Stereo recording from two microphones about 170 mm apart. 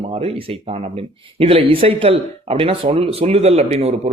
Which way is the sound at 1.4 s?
35° right (ahead or behind).